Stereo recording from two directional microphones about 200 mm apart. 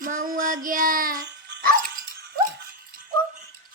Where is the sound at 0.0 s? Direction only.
45° right (ahead or behind).